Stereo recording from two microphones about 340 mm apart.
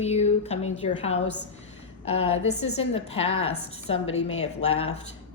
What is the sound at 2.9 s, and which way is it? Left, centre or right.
A woman's voice, centre.